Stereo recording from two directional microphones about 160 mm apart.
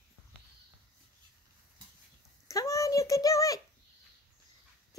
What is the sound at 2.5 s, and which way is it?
Speech, 20° left (ahead or behind).